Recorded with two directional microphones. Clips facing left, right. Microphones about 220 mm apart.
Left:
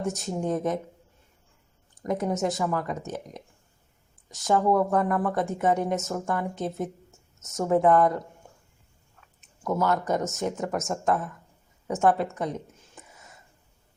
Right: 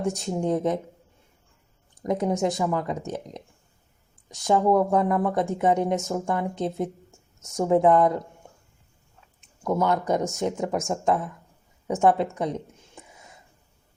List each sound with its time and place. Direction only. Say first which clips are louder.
0.0 s speech: right 3 dB; 15° right (ahead or behind)
2.0 s speech: right 2 dB; 15° right (ahead or behind)
9.6 s speech: right 2 dB; 15° right (ahead or behind)
11.9 s a sound: right 2 dB; 15° right (ahead or behind)